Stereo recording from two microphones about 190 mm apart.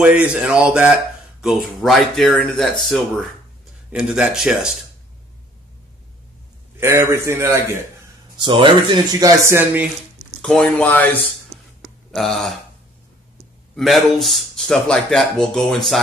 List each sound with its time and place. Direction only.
0.0 s speech: 5° right (ahead or behind)
6.8 s speech: 10° right (ahead or behind)
8.4 s speech: 25° right (ahead or behind)
10.4 s speech: 5° left (ahead or behind)
13.7 s speech: centre (ahead or behind)